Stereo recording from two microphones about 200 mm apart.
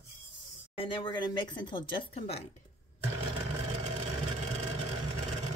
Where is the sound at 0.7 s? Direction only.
25° left (ahead or behind).